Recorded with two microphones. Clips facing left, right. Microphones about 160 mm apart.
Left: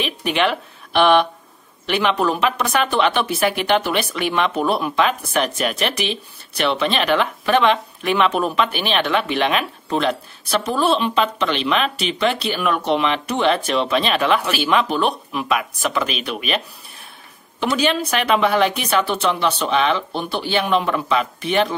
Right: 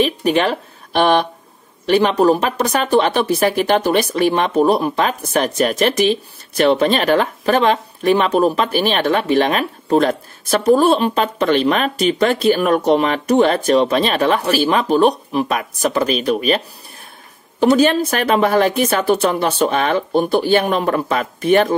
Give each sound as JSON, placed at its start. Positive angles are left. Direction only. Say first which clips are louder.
{"t": 0.0, "sound": "speech", "louder": "right 5 dB", "side_deg": -40}